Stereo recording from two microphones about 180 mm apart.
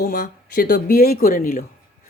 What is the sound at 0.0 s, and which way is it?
Speech, 55° left (ahead or behind).